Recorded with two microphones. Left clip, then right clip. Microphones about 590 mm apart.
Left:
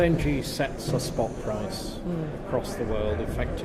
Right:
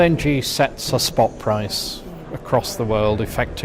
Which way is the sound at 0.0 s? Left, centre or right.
Right.